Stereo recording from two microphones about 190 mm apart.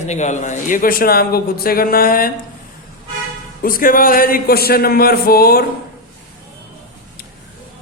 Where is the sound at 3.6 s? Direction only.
50° left (ahead or behind).